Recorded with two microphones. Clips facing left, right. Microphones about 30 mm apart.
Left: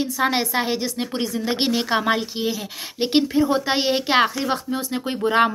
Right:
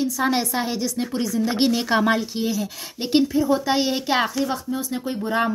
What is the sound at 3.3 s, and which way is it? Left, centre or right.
A woman's voice, left.